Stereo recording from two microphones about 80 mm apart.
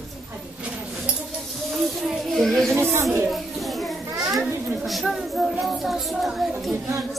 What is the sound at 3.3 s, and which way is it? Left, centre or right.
Children playing, centre.